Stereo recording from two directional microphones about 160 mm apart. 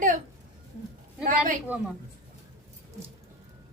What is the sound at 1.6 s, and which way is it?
Speech, 5° right (ahead or behind).